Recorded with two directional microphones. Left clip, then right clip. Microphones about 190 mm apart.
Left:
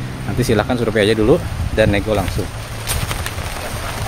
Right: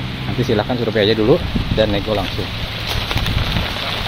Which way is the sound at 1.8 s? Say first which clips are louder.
Left 2 dB; 25° left (ahead or behind).